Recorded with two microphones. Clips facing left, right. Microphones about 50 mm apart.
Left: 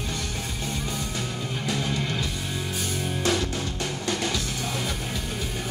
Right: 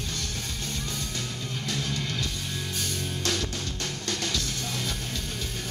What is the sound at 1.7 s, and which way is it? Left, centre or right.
Music, centre.